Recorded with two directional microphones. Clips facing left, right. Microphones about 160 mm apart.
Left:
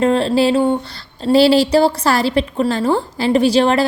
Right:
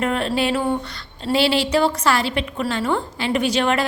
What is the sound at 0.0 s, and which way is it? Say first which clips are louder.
Speech: left 7 dB; 30° left (ahead or behind).